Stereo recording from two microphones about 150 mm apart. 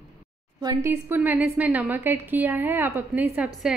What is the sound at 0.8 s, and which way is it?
A woman's voice, 15° right (ahead or behind).